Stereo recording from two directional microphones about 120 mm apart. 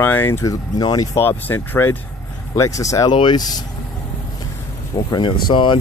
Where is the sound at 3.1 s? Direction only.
40° left (ahead or behind).